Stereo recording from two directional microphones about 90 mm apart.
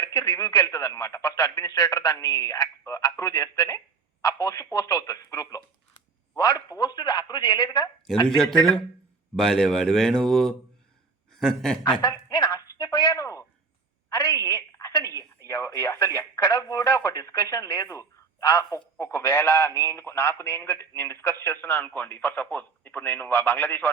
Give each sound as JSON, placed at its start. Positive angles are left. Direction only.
{"t": 0.0, "sound": "speech", "side_deg": 40}
{"t": 8.4, "sound": "a man's voice", "side_deg": 5}
{"t": 11.8, "sound": "a woman's voice", "side_deg": 50}
{"t": 15.1, "sound": "a sound", "side_deg": -40}
{"t": 15.4, "sound": "speech", "side_deg": 35}